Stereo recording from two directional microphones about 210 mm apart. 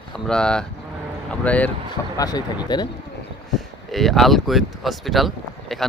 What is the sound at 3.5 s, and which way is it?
Speech, centre (ahead or behind).